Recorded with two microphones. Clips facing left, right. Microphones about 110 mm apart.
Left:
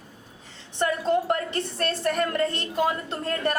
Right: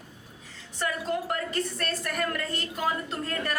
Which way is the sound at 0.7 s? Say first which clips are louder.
Left 6 dB; 30° left (ahead or behind).